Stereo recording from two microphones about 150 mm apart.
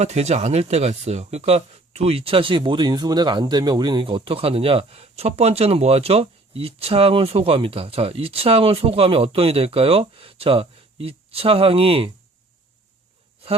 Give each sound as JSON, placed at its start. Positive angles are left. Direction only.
{"t": 0.0, "sound": "speech", "side_deg": -45}